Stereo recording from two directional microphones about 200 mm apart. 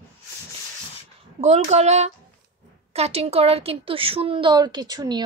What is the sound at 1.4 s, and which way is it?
A woman's voice, 35° right (ahead or behind).